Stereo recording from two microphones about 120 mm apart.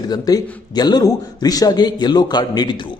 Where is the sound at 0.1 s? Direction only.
35° left (ahead or behind).